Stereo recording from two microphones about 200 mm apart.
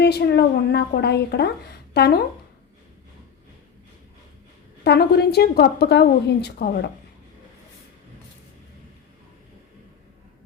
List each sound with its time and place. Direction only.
0.0 s a woman's voice: 55° left (ahead or behind)
4.8 s a woman's voice: 55° left (ahead or behind)